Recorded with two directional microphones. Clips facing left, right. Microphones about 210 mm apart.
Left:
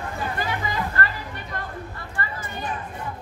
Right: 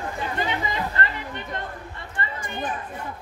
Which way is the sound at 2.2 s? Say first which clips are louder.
Even; 20° right (ahead or behind).